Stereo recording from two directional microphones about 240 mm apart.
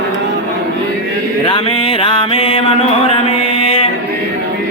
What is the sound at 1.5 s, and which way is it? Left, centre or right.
Mantra, left.